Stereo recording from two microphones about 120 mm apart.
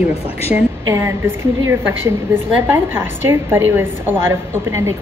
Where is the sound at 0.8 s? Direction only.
25° right (ahead or behind).